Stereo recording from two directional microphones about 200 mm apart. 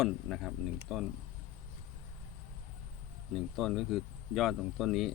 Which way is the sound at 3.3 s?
Centre (ahead or behind).